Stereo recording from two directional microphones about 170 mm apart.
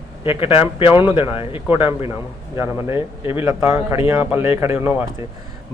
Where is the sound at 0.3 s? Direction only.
30° left (ahead or behind).